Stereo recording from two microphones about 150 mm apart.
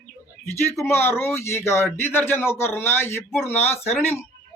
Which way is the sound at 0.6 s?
15° left (ahead or behind).